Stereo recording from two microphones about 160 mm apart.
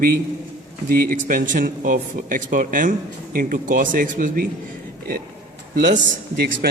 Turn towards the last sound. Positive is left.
turn(degrees=-85)